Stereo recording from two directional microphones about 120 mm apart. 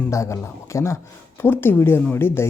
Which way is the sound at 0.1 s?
25° left (ahead or behind).